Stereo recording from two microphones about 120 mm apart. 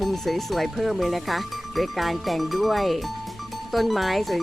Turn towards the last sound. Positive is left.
turn(degrees=0)  # may be behind; listen again after turning